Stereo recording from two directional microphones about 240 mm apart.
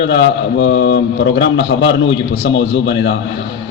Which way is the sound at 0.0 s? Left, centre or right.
Left.